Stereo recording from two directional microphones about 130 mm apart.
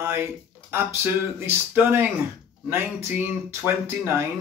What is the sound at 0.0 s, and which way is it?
Speech, 20° right (ahead or behind).